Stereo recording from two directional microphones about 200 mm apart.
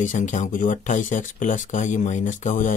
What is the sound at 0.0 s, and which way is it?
A man's voice, 40° left (ahead or behind).